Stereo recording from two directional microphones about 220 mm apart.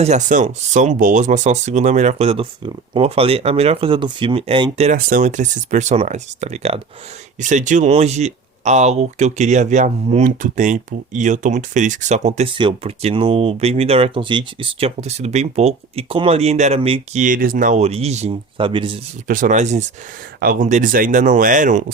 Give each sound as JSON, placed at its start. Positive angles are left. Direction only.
{"t": 0.0, "sound": "speech", "side_deg": -35}
{"t": 4.9, "sound": "speech", "side_deg": -40}
{"t": 17.2, "sound": "speech", "side_deg": -40}
{"t": 19.3, "sound": "speech", "side_deg": -35}